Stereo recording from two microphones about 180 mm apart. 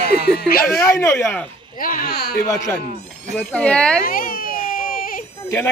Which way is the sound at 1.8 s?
50° left (ahead or behind).